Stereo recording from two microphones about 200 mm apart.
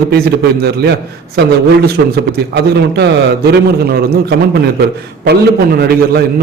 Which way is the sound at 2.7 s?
55° right (ahead or behind).